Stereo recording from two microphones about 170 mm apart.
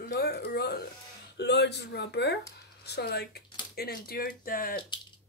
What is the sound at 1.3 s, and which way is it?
Speech, 85° left.